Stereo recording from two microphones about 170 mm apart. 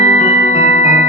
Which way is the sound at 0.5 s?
40° left (ahead or behind).